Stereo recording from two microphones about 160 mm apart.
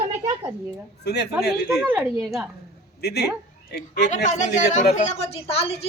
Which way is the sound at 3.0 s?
90° left.